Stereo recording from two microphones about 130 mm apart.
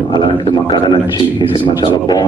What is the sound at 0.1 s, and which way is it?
A man's voice, 40° left (ahead or behind).